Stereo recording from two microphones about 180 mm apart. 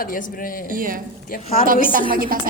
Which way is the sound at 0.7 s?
50° right (ahead or behind).